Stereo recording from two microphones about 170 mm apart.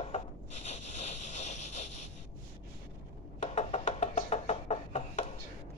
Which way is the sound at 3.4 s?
45° left (ahead or behind).